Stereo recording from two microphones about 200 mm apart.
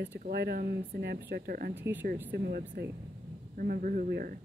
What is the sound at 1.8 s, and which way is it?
Speech, 10° right (ahead or behind).